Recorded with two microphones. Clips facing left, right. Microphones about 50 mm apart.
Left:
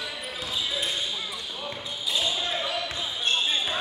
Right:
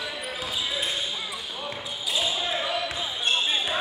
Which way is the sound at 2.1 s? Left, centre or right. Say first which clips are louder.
Right 1 dB; centre.